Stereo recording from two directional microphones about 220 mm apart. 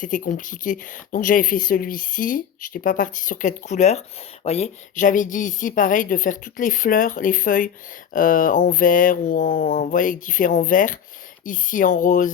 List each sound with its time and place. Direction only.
0.0 s speech: 35° left (ahead or behind)